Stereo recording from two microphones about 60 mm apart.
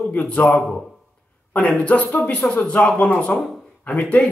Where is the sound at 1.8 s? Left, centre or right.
Left.